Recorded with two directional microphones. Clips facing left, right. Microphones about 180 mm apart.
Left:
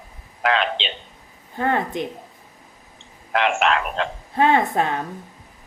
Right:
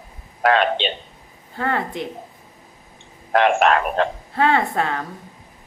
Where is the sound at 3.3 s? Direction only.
50° right (ahead or behind).